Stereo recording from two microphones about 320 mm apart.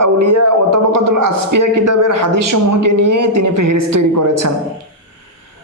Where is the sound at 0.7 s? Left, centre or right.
Right.